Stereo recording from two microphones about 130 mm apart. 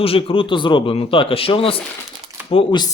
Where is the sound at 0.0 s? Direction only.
45° left (ahead or behind).